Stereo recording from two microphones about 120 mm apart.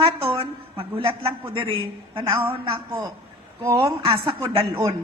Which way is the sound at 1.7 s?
50° right (ahead or behind).